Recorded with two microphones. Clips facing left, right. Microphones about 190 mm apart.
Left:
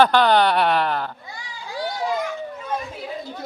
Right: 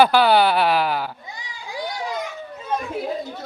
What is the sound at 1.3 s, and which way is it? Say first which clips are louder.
Children playing: left 1 dB; 20° right (ahead or behind).